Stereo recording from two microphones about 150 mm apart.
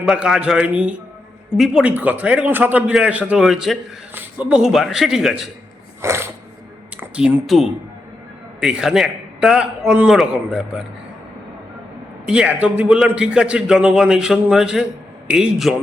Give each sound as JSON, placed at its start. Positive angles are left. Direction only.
{"t": 0.0, "sound": "a man's voice", "side_deg": -5}
{"t": 6.0, "sound": "a sound", "side_deg": -15}
{"t": 6.9, "sound": "a man's voice", "side_deg": -5}
{"t": 12.2, "sound": "a man's voice", "side_deg": -5}